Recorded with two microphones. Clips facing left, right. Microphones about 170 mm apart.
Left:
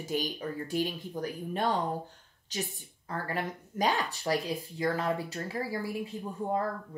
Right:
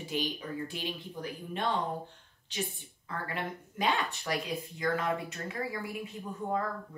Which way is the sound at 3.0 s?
40° left (ahead or behind).